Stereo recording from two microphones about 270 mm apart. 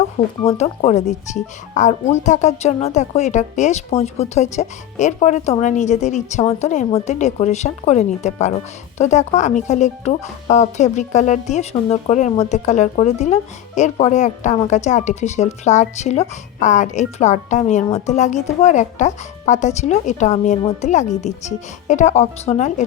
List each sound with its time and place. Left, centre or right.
0.4 s a woman's voice: left